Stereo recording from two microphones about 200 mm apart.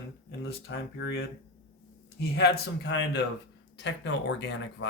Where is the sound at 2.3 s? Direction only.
60° left (ahead or behind).